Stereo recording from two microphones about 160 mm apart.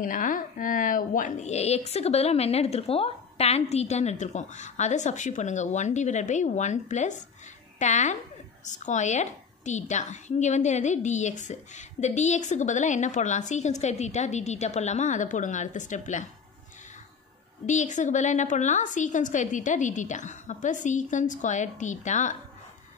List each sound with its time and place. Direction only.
0.0 s a woman's voice: 55° left (ahead or behind)
17.6 s a woman's voice: 50° left (ahead or behind)